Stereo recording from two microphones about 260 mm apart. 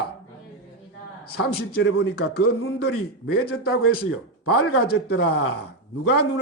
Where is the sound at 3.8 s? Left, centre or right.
Left.